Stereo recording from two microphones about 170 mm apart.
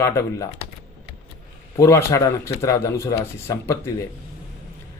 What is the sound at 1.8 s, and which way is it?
A man's voice, 15° left (ahead or behind).